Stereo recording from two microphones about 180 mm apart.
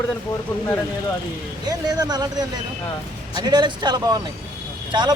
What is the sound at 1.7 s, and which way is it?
Speech, 20° right (ahead or behind).